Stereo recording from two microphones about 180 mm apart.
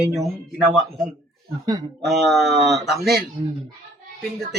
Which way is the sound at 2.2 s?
Centre (ahead or behind).